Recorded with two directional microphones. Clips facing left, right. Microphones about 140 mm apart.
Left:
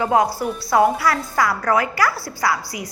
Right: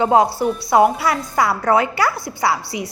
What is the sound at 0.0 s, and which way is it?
A woman's voice, 25° right (ahead or behind).